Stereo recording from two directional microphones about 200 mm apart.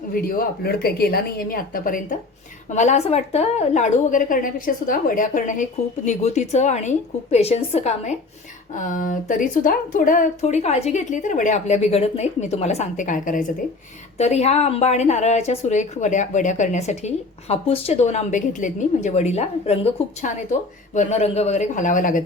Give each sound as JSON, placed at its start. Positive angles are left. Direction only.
{"t": 0.1, "sound": "a woman's voice", "side_deg": 45}